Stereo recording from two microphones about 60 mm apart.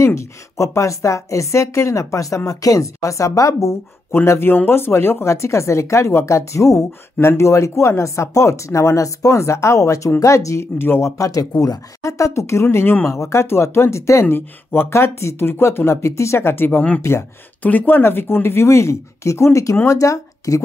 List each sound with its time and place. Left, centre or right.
0.0 s speech: left
4.1 s speech: left
10.8 s speech: left
12.7 s speech: left
13.1 s speech: left
14.3 s speech: left